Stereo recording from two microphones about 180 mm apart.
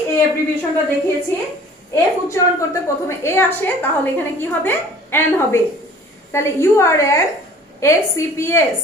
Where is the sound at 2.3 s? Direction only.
15° left (ahead or behind).